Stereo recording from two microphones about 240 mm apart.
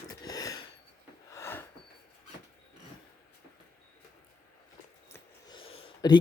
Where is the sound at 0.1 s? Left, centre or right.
Centre.